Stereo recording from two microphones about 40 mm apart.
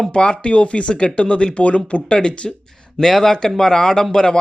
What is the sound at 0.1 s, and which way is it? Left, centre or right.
Speech, left.